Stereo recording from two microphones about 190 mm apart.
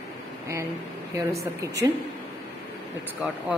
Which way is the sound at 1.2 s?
15° right (ahead or behind).